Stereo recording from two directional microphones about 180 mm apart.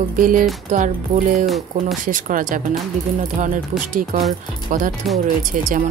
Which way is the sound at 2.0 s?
45° right (ahead or behind).